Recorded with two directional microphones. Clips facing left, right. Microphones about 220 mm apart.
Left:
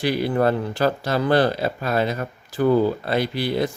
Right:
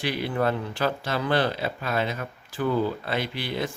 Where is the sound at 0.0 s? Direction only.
40° left (ahead or behind).